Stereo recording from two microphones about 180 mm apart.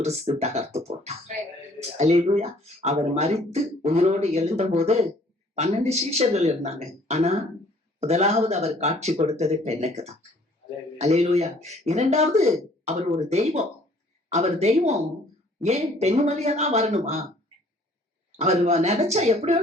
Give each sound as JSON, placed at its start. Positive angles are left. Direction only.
{"t": 0.0, "sound": "speech", "side_deg": -35}
{"t": 18.3, "sound": "speech", "side_deg": -35}